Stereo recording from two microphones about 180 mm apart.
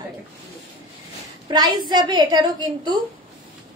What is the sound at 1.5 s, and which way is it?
A woman's voice, 25° right (ahead or behind).